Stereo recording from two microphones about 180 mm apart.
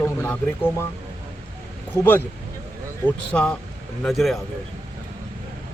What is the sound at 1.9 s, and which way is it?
Speech, 10° left (ahead or behind).